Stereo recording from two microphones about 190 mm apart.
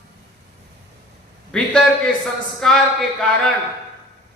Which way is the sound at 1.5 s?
5° left (ahead or behind).